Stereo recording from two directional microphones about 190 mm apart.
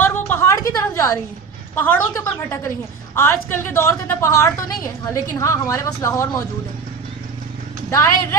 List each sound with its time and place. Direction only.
0.0 s a sound: 10° left (ahead or behind)
1.7 s a woman's voice: 10° left (ahead or behind)
7.9 s a woman's voice: 15° left (ahead or behind)